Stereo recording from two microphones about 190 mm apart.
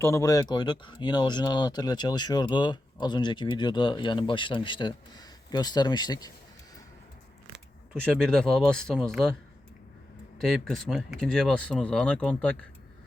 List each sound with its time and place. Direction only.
0.0 s speech: 15° left (ahead or behind)
8.2 s speech: 5° left (ahead or behind)
10.4 s speech: centre (ahead or behind)